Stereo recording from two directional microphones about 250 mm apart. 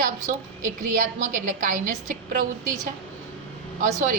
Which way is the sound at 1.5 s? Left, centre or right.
Right.